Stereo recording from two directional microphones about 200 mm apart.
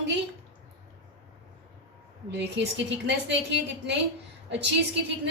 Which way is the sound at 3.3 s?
60° right (ahead or behind).